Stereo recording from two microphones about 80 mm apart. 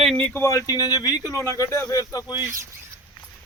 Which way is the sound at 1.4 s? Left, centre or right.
Left.